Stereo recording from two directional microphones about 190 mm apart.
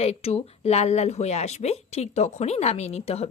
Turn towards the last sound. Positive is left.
turn(degrees=30)  # may be behind; listen again after turning